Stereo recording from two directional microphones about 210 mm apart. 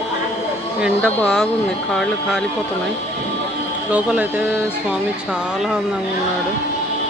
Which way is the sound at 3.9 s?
5° right (ahead or behind).